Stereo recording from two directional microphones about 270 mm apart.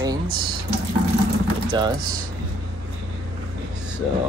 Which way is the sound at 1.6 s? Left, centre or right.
Centre.